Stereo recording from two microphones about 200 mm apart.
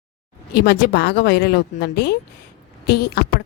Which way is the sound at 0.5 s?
50° left (ahead or behind).